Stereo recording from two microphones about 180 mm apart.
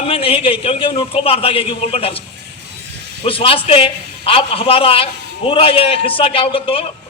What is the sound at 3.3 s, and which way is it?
A man's voice, 30° left (ahead or behind).